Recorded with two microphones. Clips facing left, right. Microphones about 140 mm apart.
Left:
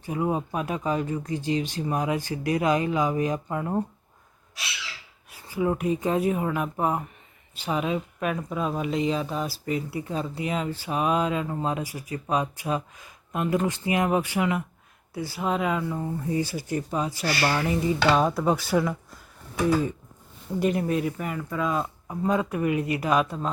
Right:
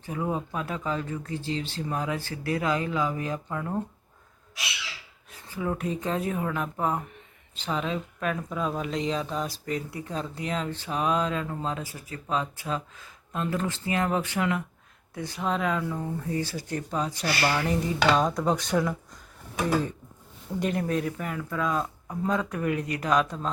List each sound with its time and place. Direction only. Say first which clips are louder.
0.0 s speech: left 3 dB; 15° left (ahead or behind)
5.3 s speech: left 5 dB; 10° left (ahead or behind)
20.6 s speech: left 3 dB; 5° left (ahead or behind)